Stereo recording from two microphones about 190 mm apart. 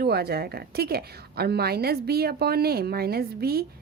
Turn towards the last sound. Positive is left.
turn(degrees=-55)  # may be behind; listen again after turning